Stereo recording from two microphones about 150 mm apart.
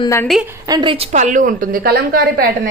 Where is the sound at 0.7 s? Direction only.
30° right (ahead or behind).